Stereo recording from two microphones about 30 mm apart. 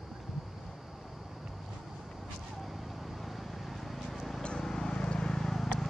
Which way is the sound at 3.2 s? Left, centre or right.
Centre.